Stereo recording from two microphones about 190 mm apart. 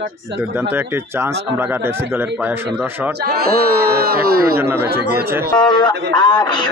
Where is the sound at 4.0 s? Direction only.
55° right (ahead or behind).